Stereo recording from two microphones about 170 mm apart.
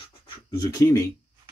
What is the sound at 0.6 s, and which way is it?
Speech, 20° left (ahead or behind).